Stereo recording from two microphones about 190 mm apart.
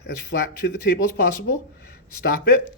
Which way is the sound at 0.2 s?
60° left (ahead or behind).